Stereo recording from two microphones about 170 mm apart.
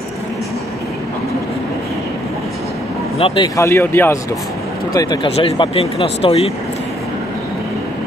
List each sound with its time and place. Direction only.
3.2 s speech: 35° left (ahead or behind)
3.5 s speech: 15° left (ahead or behind)
4.9 s speech: 25° left (ahead or behind)